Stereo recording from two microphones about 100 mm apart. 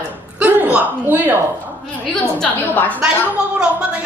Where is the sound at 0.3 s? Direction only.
15° right (ahead or behind).